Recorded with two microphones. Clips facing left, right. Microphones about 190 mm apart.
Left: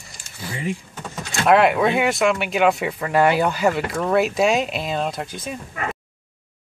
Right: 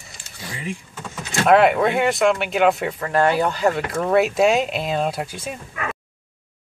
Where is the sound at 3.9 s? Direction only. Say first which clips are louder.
Right 1 dB; 5° right (ahead or behind).